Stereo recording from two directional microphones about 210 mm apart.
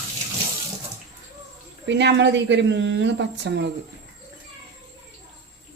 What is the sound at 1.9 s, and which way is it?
A woman's voice, 55° right (ahead or behind).